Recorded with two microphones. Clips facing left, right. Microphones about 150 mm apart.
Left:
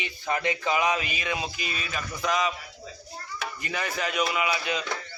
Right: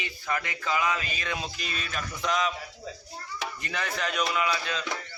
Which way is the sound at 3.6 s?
5° left (ahead or behind).